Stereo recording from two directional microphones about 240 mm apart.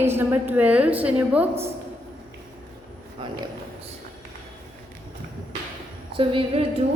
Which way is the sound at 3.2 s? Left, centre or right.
Centre.